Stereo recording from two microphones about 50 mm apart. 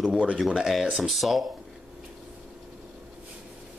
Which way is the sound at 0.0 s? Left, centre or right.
Centre.